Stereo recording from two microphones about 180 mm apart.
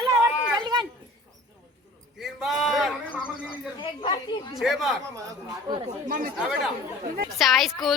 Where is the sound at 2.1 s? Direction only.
Centre (ahead or behind).